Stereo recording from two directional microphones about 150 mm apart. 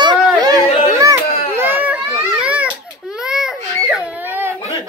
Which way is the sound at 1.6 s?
15° right (ahead or behind).